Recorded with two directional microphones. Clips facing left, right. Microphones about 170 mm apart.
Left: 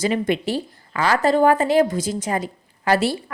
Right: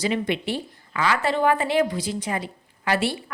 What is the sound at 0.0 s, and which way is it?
Speech, 45° left (ahead or behind).